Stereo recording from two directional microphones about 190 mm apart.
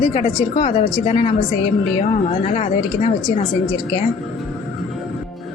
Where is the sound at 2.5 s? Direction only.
35° left (ahead or behind).